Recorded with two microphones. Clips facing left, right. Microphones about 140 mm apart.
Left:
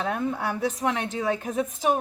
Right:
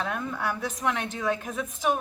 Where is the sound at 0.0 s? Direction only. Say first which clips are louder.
Left 3 dB; 35° left (ahead or behind).